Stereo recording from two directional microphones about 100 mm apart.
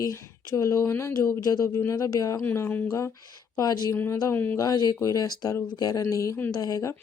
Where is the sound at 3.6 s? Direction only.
40° left (ahead or behind).